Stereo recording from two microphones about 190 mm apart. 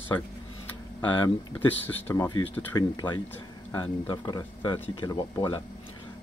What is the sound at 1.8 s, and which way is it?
Speech, 15° left (ahead or behind).